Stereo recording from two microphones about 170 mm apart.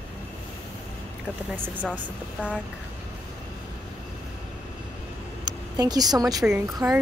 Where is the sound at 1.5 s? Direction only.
10° right (ahead or behind).